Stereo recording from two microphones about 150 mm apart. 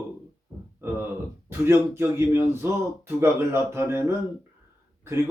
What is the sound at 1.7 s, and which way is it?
Speech, 15° right (ahead or behind).